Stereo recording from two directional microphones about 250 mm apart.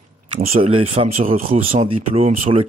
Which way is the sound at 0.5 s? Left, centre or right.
Right.